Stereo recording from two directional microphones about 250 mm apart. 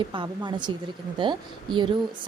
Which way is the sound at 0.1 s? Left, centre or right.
Centre.